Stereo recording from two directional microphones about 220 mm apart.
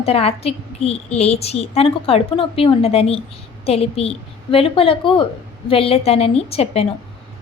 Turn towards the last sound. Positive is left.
turn(degrees=25)  # may be behind; listen again after turning